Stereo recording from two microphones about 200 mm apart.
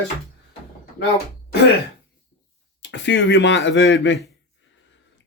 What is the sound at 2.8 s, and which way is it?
Speech, 60° left (ahead or behind).